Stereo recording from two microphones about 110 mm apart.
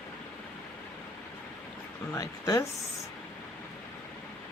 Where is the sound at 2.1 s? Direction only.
30° left (ahead or behind).